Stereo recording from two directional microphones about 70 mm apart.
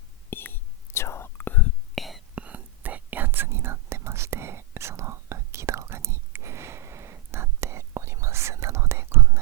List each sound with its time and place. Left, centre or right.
0.3 s whispering: left
2.0 s whispering: centre
2.3 s whispering: right